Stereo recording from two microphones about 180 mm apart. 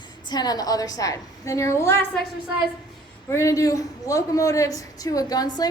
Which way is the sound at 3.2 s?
15° left (ahead or behind).